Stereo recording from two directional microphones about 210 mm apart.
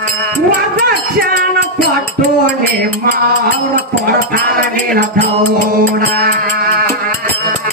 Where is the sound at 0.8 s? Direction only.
50° right (ahead or behind).